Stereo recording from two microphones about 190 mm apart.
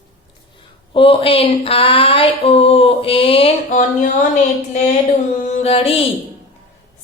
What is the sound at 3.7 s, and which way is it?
Speech, 40° left (ahead or behind).